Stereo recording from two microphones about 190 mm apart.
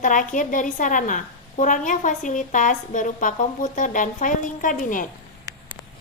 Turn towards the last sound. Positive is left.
turn(degrees=45)  # may be behind; listen again after turning